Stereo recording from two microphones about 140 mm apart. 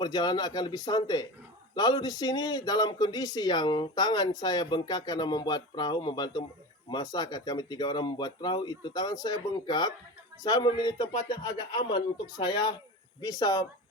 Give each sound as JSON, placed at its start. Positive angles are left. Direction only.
{"t": 0.0, "sound": "speech", "side_deg": 30}